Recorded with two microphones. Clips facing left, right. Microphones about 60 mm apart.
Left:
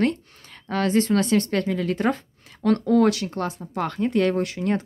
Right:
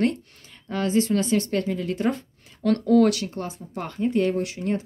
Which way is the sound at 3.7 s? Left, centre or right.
Left.